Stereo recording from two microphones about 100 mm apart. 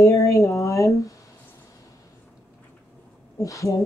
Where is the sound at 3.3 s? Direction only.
35° left (ahead or behind).